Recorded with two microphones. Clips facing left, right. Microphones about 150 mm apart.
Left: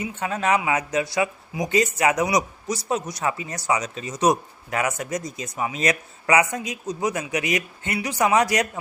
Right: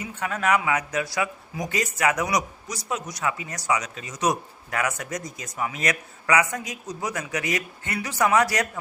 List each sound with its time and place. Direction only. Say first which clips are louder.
0.0 s speech: left 2 dB; 25° left (ahead or behind)